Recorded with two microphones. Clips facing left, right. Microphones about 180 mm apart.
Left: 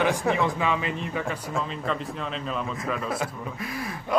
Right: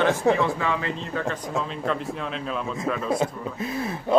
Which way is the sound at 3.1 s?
25° right (ahead or behind).